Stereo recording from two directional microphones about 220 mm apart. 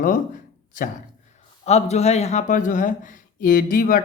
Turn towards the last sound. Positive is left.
turn(degrees=40)  # may be behind; listen again after turning